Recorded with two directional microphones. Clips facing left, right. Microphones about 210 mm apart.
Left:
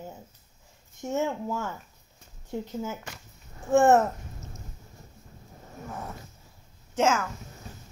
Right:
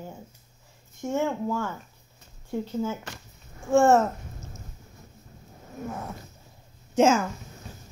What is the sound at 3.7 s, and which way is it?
Speech, 20° left (ahead or behind).